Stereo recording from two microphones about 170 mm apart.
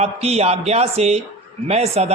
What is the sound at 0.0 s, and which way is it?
A man's voice, 40° right (ahead or behind).